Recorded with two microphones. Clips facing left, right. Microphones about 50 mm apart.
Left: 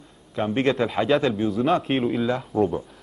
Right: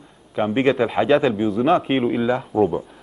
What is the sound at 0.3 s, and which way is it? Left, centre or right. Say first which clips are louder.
Speech: right 4 dB; centre.